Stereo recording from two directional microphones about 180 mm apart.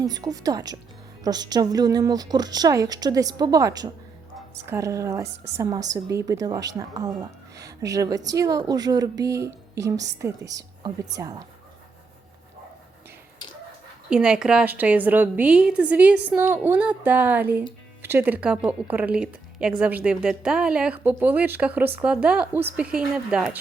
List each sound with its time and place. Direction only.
0.0 s a woman's voice: 20° right (ahead or behind)
14.1 s a woman's voice: 5° right (ahead or behind)